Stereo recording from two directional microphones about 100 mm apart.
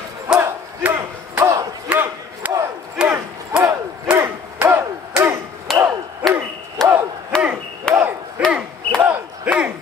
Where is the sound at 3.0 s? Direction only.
10° right (ahead or behind).